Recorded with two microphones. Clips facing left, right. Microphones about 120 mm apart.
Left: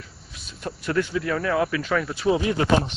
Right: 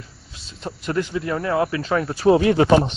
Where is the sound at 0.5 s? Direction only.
20° right (ahead or behind).